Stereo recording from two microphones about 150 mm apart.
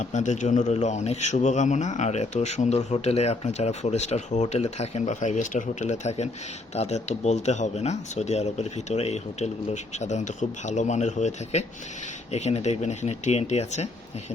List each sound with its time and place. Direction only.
0.0 s a man's voice: 55° left (ahead or behind)